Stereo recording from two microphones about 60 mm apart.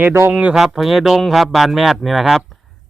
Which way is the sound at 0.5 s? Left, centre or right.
Centre.